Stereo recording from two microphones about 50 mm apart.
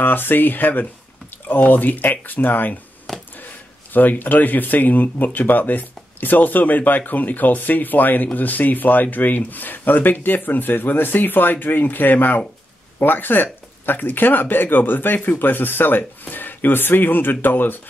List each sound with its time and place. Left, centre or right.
0.0 s speech: left
3.1 s a sound: centre
3.9 s speech: left